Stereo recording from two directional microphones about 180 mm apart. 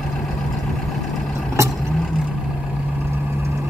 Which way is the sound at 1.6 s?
15° right (ahead or behind).